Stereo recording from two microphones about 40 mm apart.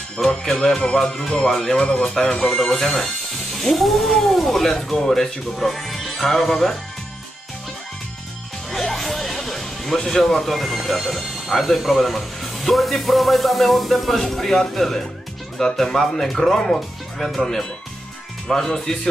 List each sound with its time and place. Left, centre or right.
0.2 s speech: centre
1.6 s speech: left
2.5 s speech: centre
8.7 s music: centre
9.9 s speech: centre